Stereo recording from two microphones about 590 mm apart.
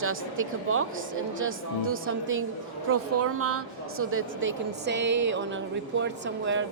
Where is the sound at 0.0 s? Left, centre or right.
Right.